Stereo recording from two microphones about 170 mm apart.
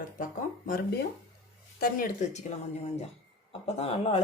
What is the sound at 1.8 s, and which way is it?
Speech, 55° left (ahead or behind).